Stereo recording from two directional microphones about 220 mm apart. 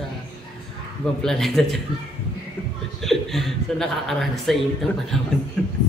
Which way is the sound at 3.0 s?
Centre (ahead or behind).